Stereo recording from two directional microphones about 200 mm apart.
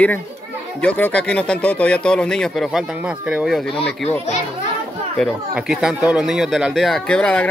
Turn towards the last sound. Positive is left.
turn(degrees=5)  # may be behind; listen again after turning